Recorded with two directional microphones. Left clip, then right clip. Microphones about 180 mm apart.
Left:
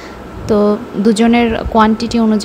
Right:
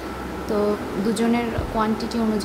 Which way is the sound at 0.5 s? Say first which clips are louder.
Left 10 dB; 40° left (ahead or behind).